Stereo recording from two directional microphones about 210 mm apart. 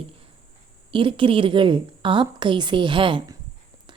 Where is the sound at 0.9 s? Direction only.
25° right (ahead or behind).